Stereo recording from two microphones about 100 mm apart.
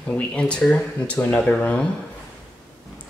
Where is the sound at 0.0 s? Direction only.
10° left (ahead or behind).